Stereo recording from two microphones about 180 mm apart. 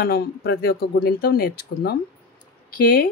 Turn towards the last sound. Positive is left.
turn(degrees=55)  # may be behind; listen again after turning